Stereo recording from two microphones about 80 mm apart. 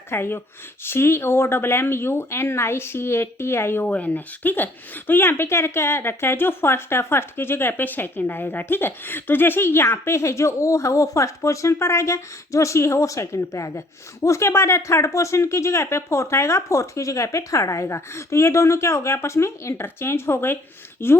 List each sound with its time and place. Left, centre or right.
0.1 s speech: left